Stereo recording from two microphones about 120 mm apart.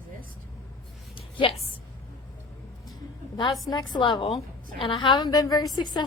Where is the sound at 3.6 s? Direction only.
35° left (ahead or behind).